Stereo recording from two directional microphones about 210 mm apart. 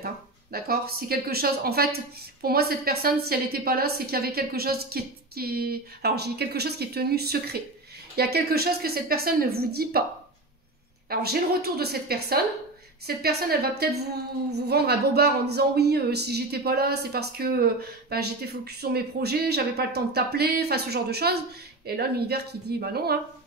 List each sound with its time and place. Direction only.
0.0 s a woman's voice: 45° right (ahead or behind)
11.1 s a woman's voice: 45° right (ahead or behind)